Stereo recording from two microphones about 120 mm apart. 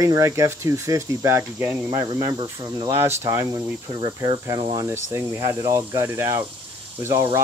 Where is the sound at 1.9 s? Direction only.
30° right (ahead or behind).